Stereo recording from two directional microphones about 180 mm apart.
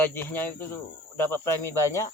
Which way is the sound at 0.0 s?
10° left (ahead or behind).